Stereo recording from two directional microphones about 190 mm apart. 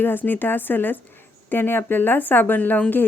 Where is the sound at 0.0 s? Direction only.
10° left (ahead or behind).